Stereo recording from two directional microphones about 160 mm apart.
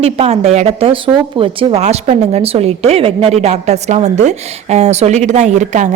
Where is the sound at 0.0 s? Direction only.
40° right (ahead or behind).